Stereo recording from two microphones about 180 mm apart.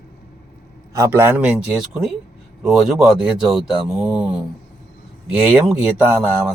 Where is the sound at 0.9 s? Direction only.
15° right (ahead or behind).